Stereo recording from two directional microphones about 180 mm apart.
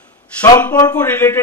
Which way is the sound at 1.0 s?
10° left (ahead or behind).